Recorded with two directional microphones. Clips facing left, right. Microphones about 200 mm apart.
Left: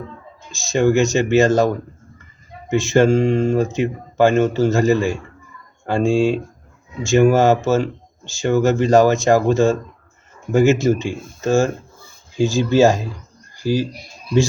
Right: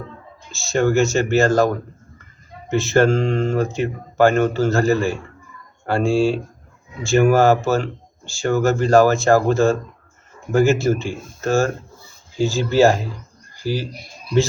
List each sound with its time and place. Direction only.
0.5 s speech: 15° left (ahead or behind)